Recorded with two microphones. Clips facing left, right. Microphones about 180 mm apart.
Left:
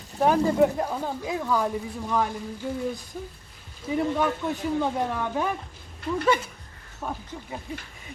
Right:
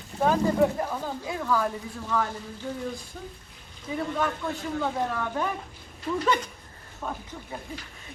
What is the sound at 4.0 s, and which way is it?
Speech, 15° left (ahead or behind).